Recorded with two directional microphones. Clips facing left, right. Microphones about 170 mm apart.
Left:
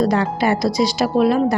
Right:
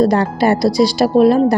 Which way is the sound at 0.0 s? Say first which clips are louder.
Right 4 dB; 35° right (ahead or behind).